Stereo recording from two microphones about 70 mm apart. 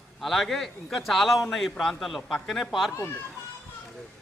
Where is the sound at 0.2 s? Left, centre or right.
Centre.